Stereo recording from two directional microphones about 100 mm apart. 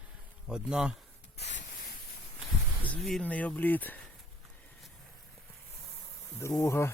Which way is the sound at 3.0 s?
5° left (ahead or behind).